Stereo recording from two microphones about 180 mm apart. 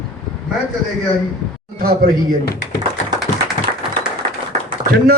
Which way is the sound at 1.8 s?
55° right (ahead or behind).